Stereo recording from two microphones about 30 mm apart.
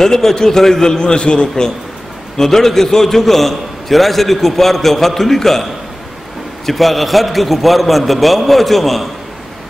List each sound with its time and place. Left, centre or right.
0.0 s a man's voice: centre; by 1.5 s left
2.3 s a man's voice: centre